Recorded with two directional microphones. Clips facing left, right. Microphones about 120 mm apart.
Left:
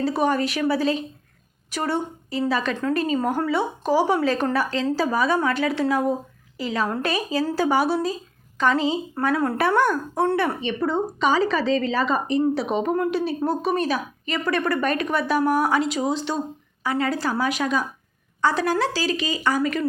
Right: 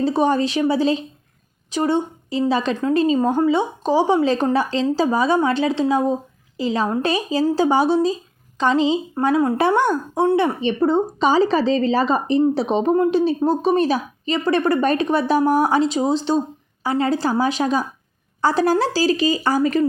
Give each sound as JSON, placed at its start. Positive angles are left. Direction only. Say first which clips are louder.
{"t": 0.0, "sound": "a woman's voice", "louder": "right 4 dB", "side_deg": -25}
{"t": 9.6, "sound": "a woman's voice", "louder": "right 3 dB", "side_deg": -25}